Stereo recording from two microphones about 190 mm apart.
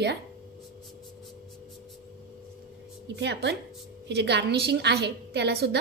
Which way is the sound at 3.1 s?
65° right (ahead or behind).